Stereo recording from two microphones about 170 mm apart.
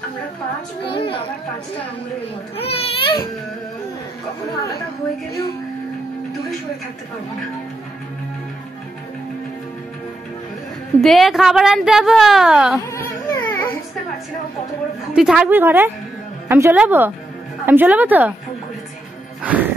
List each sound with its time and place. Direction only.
0.9 s a child's voice: 30° left (ahead or behind)
2.5 s a child's voice: 35° left (ahead or behind)
11.0 s a woman's voice: centre (ahead or behind)
12.9 s baby cry: 15° left (ahead or behind)
15.1 s a woman's voice: 5° right (ahead or behind)
19.4 s speech: 10° right (ahead or behind)